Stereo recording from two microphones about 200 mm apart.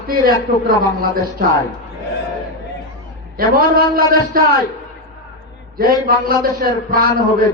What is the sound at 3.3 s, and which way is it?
A man's voice, 45° right (ahead or behind).